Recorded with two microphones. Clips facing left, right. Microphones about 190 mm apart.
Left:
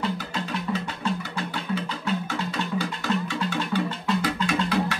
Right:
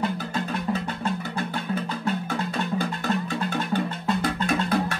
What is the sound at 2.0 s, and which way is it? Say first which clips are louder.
Music: even; 55° right (ahead or behind).